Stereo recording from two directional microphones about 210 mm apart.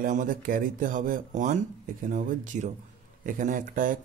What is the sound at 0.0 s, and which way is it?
Speech, 40° right (ahead or behind).